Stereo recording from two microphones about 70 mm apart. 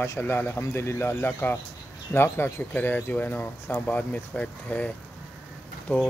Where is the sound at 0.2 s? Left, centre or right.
Left.